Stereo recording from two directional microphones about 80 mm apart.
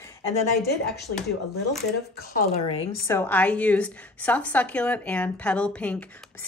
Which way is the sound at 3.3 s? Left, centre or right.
Centre.